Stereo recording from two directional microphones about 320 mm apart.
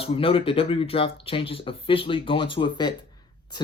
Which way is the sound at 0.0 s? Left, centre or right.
Centre.